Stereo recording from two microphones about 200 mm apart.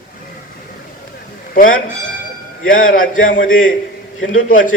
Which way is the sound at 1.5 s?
45° left (ahead or behind).